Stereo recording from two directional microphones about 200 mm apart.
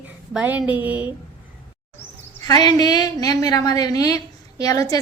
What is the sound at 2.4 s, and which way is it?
A woman's voice, 20° left (ahead or behind).